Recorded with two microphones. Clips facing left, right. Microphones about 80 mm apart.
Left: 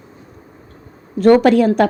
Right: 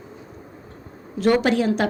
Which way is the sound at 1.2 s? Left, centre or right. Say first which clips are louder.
Left 8 dB; left.